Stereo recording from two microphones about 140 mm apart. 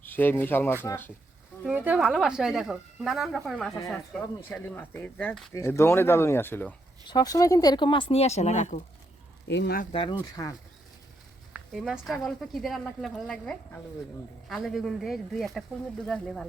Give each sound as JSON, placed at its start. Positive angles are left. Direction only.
{"t": 0.0, "sound": "speech", "side_deg": 15}
{"t": 1.6, "sound": "a woman's voice", "side_deg": -10}
{"t": 4.4, "sound": "speech", "side_deg": 15}
{"t": 5.5, "sound": "speech", "side_deg": 20}
{"t": 7.1, "sound": "speech", "side_deg": 25}
{"t": 9.9, "sound": "speech", "side_deg": 35}
{"t": 10.2, "sound": "speech", "side_deg": 25}
{"t": 11.7, "sound": "a woman's voice", "side_deg": 0}